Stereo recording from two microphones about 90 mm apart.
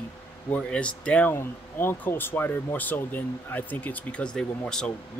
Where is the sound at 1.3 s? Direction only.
25° left (ahead or behind).